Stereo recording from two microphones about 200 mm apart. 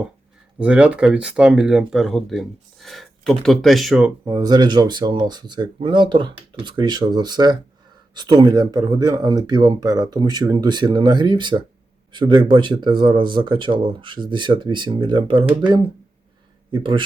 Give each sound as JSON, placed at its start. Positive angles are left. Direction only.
{"t": 0.6, "sound": "speech", "side_deg": -5}
{"t": 4.3, "sound": "speech", "side_deg": -20}
{"t": 16.7, "sound": "speech", "side_deg": -25}